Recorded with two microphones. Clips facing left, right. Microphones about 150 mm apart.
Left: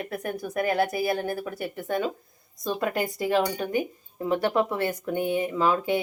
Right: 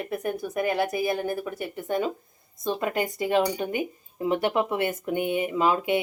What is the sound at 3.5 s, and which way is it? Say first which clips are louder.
Speech: left 1 dB; 15° right (ahead or behind).